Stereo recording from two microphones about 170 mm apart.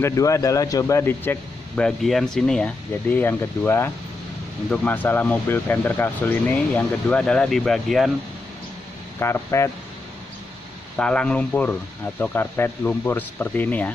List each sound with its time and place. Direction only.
0.0 s a man's voice: 20° left (ahead or behind); by 8.1 s centre (ahead or behind)
9.2 s a man's voice: 15° left (ahead or behind)
11.0 s a man's voice: 5° left (ahead or behind)